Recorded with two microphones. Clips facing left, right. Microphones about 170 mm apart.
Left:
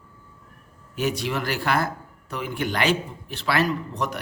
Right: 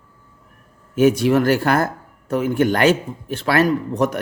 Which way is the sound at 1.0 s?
50° right (ahead or behind).